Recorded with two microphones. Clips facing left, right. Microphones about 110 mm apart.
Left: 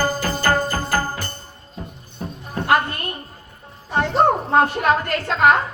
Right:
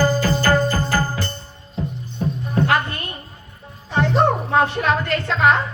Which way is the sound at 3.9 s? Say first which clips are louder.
Even; 45° left (ahead or behind).